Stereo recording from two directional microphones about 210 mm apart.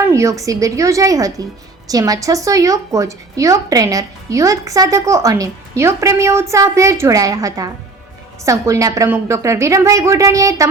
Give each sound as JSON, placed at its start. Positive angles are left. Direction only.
{"t": 0.1, "sound": "a woman's voice", "side_deg": -15}